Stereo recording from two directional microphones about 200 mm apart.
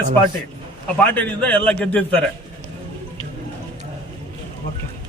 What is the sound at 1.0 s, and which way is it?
Speech, 5° left (ahead or behind).